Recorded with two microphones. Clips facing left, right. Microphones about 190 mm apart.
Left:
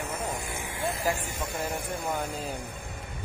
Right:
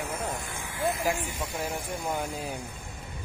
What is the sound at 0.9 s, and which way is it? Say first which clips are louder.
Speech: even; 35° left (ahead or behind).